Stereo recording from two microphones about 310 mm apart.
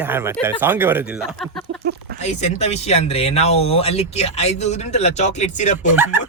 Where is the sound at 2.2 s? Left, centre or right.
Left.